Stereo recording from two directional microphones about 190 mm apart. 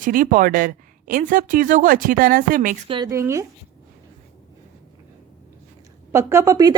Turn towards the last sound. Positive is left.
turn(degrees=-20)  # may be behind; listen again after turning